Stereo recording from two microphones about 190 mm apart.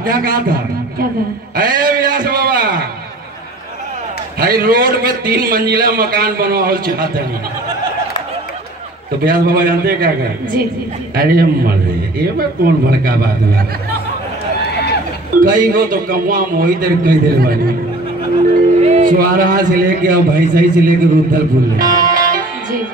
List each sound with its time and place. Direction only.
0.0 s a man's voice: 50° right (ahead or behind)
1.6 s a sound: 50° right (ahead or behind)
4.4 s a man's voice: 50° right (ahead or behind)
9.2 s a man's voice: 50° right (ahead or behind)
15.4 s a man's voice: 45° right (ahead or behind)
18.8 s a man's voice: 40° right (ahead or behind)